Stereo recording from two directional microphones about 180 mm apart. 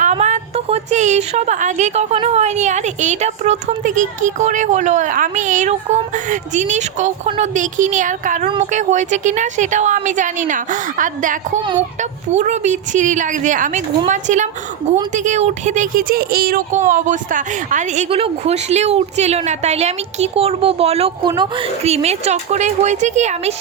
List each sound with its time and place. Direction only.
0.0 s a woman's voice: 40° right (ahead or behind)
18.1 s a woman's voice: 35° right (ahead or behind)